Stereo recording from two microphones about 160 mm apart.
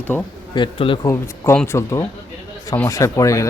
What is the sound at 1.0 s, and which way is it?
Speech, 15° left (ahead or behind).